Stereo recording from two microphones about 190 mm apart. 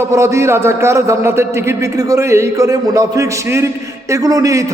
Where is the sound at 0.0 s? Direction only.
15° right (ahead or behind).